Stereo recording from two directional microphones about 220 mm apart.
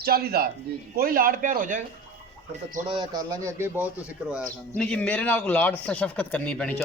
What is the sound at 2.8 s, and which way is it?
Speech, 20° right (ahead or behind).